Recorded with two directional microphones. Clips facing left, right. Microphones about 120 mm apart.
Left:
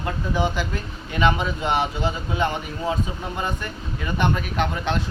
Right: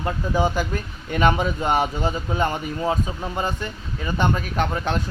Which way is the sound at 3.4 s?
30° right (ahead or behind).